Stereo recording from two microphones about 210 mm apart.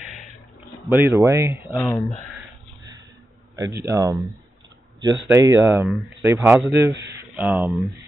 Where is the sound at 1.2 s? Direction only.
15° right (ahead or behind).